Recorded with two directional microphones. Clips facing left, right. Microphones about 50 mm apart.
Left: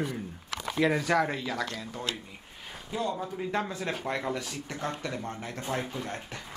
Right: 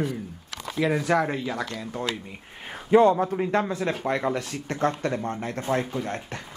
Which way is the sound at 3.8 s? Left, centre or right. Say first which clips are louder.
Right 6 dB; right.